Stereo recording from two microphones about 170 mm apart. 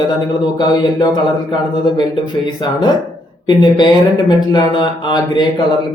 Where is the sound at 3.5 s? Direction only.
25° left (ahead or behind).